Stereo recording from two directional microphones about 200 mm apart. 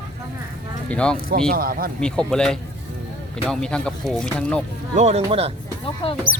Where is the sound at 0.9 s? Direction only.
5° left (ahead or behind).